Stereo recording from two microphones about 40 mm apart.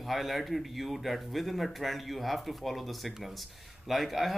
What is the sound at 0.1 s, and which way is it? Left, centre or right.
Speech, centre.